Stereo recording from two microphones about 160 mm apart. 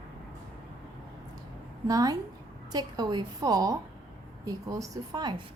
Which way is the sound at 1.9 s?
20° right (ahead or behind).